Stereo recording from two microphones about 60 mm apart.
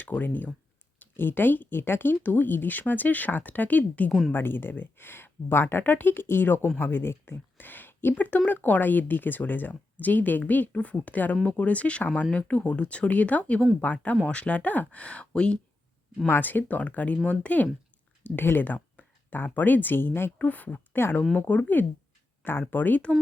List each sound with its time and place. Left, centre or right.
0.0 s speech: left
4.3 s speech: left; by 15.5 s centre
16.2 s speech: left
18.2 s a sound: left
19.5 s speech: left